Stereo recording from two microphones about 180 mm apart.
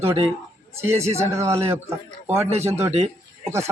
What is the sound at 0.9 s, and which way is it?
Speech, 35° right (ahead or behind).